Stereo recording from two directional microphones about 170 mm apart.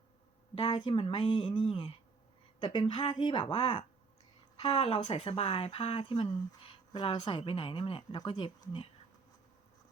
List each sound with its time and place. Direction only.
0.5 s speech: 30° left (ahead or behind)